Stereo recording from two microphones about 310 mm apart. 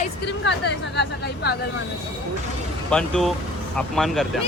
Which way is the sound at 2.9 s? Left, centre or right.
Centre.